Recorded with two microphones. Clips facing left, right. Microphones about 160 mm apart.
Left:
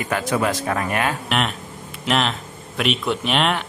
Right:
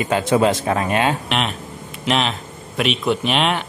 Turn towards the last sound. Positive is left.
turn(degrees=0)  # may be behind; listen again after turning